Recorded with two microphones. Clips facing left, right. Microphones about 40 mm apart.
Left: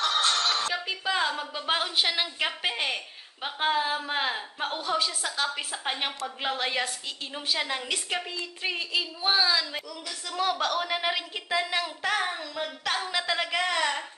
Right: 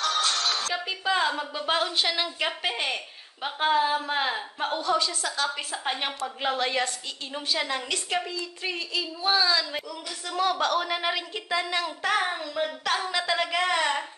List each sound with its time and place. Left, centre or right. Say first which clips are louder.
0.0 s music: left 1 dB; left
0.7 s a woman's voice: right 2 dB; centre
1.7 s a woman's voice: right 1 dB; centre
8.3 s a woman's voice: even; left
9.8 s speech: right 2 dB; centre
10.4 s a woman's voice: right 2 dB; centre
12.2 s speech: right 3 dB; centre
12.8 s a woman's voice: even; centre